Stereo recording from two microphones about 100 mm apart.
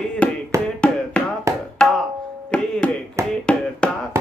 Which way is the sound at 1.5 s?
30° right (ahead or behind).